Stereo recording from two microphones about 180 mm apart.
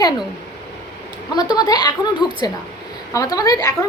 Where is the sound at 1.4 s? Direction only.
20° left (ahead or behind).